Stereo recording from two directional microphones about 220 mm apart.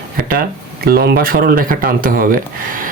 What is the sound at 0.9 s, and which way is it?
Speech, 45° right (ahead or behind).